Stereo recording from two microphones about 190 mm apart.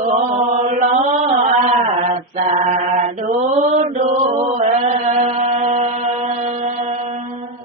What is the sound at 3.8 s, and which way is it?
Chant, 40° right (ahead or behind).